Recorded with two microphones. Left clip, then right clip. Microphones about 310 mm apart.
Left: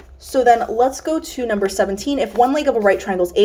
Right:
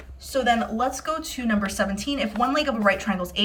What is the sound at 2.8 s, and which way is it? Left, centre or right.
Speech, centre.